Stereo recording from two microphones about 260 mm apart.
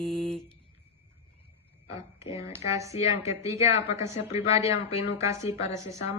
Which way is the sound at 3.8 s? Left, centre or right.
Left.